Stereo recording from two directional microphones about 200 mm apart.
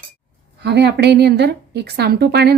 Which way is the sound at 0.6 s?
55° right (ahead or behind).